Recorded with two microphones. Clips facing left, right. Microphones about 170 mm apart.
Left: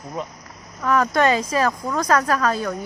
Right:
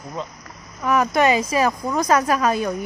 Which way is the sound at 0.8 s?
10° right (ahead or behind).